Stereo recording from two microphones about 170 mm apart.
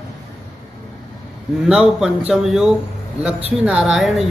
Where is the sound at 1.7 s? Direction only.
5° right (ahead or behind).